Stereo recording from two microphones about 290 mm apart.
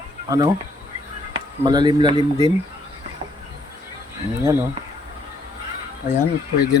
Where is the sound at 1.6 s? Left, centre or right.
Centre.